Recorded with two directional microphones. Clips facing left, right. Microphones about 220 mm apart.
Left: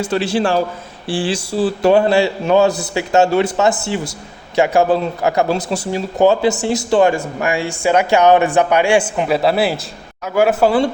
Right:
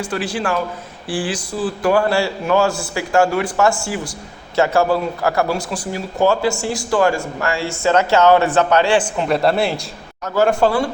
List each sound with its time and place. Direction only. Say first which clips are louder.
0.0 s a man's voice: left 5 dB; 25° left (ahead or behind); by 10.8 s 10° left (ahead or behind)